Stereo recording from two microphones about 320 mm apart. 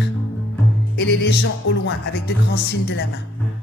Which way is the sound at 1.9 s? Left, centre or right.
Left.